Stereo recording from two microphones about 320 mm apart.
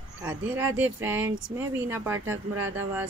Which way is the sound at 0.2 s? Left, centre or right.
Centre.